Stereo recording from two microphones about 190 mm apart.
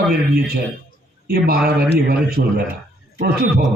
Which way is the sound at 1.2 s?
55° right (ahead or behind).